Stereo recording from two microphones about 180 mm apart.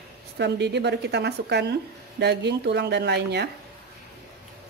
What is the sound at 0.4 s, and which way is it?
A woman's voice, 70° right (ahead or behind).